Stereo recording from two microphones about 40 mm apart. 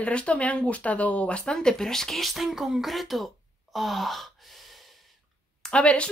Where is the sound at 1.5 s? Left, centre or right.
Centre.